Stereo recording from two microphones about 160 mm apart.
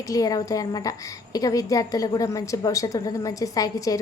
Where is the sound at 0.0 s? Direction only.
20° left (ahead or behind).